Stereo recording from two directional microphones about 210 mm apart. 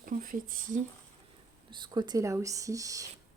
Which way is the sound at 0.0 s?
40° right (ahead or behind).